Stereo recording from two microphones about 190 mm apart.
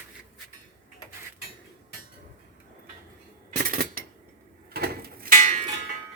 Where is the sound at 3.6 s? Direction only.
50° right (ahead or behind).